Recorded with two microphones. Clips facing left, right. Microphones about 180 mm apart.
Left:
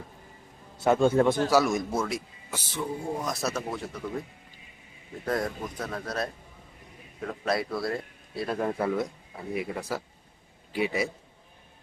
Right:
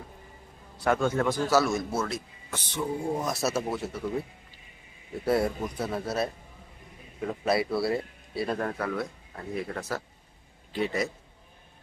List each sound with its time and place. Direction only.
0.8 s a man's voice: 25° left (ahead or behind)
1.5 s a man's voice: 15° left (ahead or behind); by 4.0 s 5° right (ahead or behind)
5.2 s a man's voice: 10° right (ahead or behind)
8.8 s a man's voice: 20° left (ahead or behind)